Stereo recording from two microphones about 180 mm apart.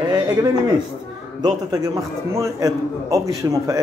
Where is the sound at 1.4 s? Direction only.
20° right (ahead or behind).